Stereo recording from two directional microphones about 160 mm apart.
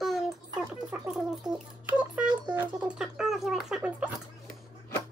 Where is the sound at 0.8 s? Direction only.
5° right (ahead or behind).